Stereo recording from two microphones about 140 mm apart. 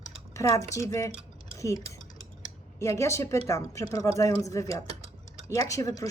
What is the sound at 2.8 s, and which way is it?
Speech, 20° left (ahead or behind).